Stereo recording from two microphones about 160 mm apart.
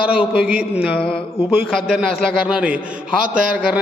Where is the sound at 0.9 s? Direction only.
5° left (ahead or behind).